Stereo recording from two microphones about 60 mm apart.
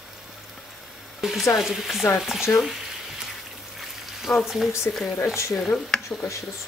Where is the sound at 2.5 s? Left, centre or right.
Left.